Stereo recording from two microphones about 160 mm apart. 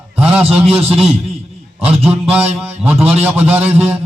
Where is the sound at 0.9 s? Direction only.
40° right (ahead or behind).